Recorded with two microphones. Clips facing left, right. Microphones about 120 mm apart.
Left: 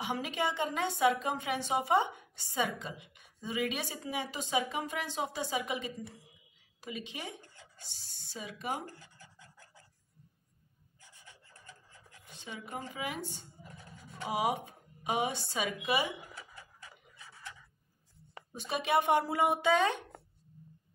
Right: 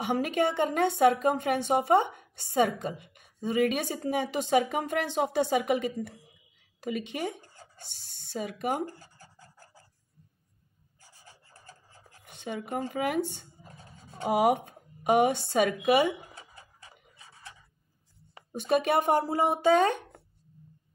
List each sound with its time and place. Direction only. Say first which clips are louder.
0.0 s a woman's voice: right 7 dB; 55° right (ahead or behind)
7.4 s a sound: right 4 dB; 40° right (ahead or behind)
7.8 s speech: right 4 dB; 65° right (ahead or behind)
9.0 s pant: right 3 dB; 40° right (ahead or behind)
11.0 s rub: right 2 dB; 35° right (ahead or behind)
12.3 s a woman's voice: right 9 dB; 60° right (ahead or behind)
13.7 s a sound: right 1 dB; 30° right (ahead or behind)
14.2 s a woman's voice: right 8 dB; 60° right (ahead or behind)
16.2 s a sound: right 1 dB; 25° right (ahead or behind)
18.5 s speech: right 6 dB; 55° right (ahead or behind)